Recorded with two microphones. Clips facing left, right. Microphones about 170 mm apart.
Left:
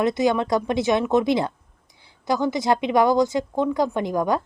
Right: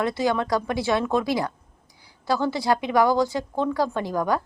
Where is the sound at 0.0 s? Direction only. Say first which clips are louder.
Left 3 dB; 20° left (ahead or behind).